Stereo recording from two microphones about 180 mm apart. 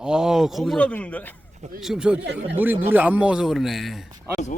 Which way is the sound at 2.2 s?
70° right (ahead or behind).